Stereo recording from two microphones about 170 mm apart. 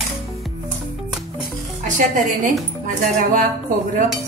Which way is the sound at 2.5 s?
50° right (ahead or behind).